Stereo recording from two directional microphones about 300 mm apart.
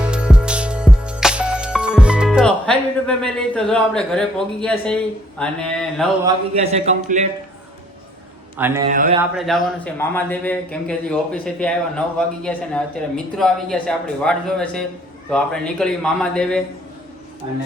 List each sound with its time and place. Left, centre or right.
0.1 s music: centre
5.4 s speech: centre
6.2 s a man's voice: right
8.5 s a man's voice: centre
8.9 s a man's voice: right
9.3 s speech: centre